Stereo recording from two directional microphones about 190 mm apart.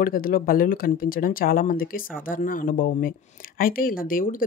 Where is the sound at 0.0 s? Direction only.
50° left (ahead or behind).